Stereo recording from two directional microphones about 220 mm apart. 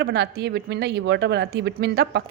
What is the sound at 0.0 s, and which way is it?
A woman's voice, 50° right (ahead or behind).